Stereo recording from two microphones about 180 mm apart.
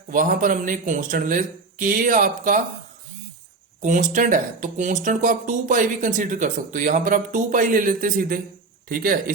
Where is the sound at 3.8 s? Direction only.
45° right (ahead or behind).